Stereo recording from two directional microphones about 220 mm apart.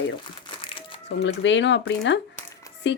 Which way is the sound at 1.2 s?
55° left (ahead or behind).